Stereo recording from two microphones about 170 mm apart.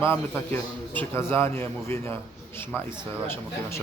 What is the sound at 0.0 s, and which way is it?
A man's voice, 10° left (ahead or behind).